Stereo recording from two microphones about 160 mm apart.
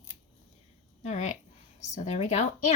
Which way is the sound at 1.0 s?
45° left (ahead or behind).